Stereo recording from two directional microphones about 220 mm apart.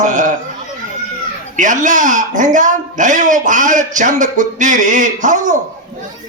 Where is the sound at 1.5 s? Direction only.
35° right (ahead or behind).